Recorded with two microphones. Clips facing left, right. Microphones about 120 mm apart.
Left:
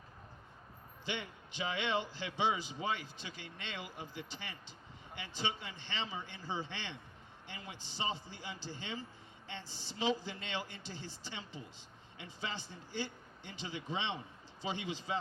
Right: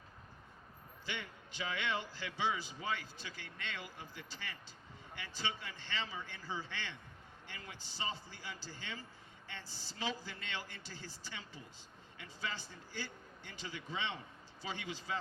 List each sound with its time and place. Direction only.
1.0 s a man's voice: 20° left (ahead or behind)